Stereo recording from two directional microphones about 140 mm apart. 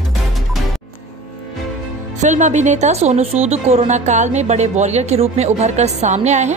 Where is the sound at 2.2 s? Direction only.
60° right (ahead or behind).